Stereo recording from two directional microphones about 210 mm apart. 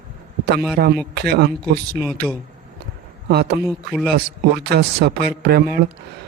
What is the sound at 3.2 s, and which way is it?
A man's voice, 50° right (ahead or behind).